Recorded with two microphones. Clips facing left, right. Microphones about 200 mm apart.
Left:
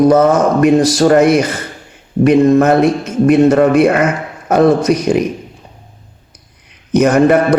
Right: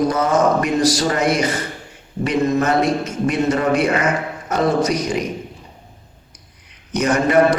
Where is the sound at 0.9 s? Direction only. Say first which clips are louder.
Left 9 dB; 55° left (ahead or behind).